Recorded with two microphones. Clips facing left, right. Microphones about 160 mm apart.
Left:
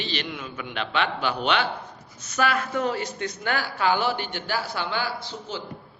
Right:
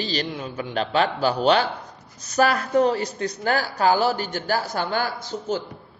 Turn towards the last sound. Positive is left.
turn(degrees=-45)  # may be behind; listen again after turning